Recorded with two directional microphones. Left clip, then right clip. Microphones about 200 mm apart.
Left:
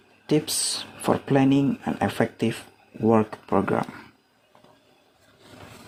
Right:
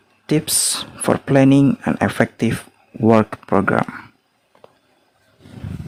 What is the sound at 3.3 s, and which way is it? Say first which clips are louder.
Speech: right 6 dB; 40° right (ahead or behind).